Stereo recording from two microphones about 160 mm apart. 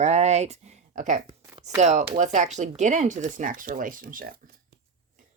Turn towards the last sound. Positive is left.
turn(degrees=-60)  # may be behind; listen again after turning